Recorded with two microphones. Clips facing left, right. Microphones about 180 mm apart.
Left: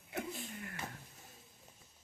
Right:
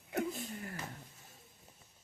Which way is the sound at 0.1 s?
40° right (ahead or behind).